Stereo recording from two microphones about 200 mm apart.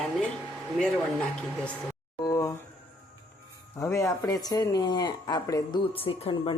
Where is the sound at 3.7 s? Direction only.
15° left (ahead or behind).